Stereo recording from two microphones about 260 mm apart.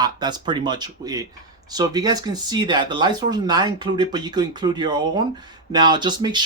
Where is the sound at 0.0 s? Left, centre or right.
Centre.